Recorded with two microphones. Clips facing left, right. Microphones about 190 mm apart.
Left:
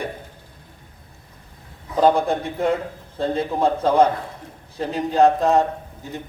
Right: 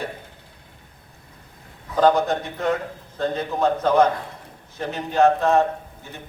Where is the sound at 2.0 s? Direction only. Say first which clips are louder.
Left 1 dB; 25° left (ahead or behind).